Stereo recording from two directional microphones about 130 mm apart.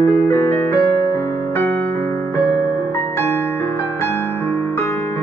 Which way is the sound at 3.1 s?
20° left (ahead or behind).